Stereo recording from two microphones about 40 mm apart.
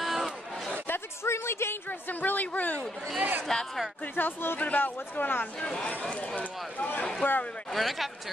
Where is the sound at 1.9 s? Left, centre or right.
Left.